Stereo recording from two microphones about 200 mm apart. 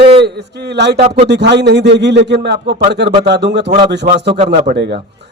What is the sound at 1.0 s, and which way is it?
Speech, 35° right (ahead or behind).